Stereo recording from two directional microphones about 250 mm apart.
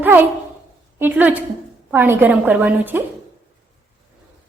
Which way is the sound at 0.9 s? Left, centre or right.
Centre.